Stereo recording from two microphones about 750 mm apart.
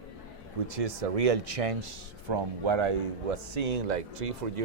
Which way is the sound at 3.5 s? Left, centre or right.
Right.